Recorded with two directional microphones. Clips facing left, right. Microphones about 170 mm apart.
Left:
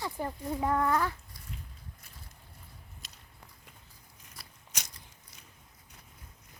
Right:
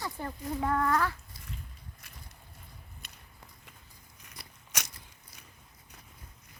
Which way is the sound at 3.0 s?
60° right (ahead or behind).